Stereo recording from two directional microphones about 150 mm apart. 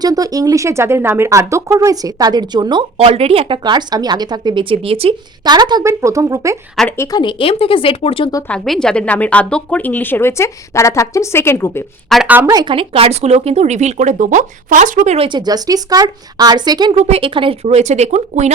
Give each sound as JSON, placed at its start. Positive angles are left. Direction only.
{"t": 0.0, "sound": "speech", "side_deg": -25}
{"t": 6.9, "sound": "a woman's voice", "side_deg": 20}
{"t": 7.2, "sound": "speech", "side_deg": 35}
{"t": 8.4, "sound": "speech", "side_deg": 5}
{"t": 12.0, "sound": "speech", "side_deg": 0}
{"t": 12.3, "sound": "speech", "side_deg": -10}
{"t": 12.5, "sound": "speech", "side_deg": -35}
{"t": 15.3, "sound": "speech", "side_deg": -25}
{"t": 17.0, "sound": "speech", "side_deg": -40}